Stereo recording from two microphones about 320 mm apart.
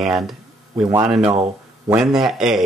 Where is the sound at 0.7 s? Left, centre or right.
Centre.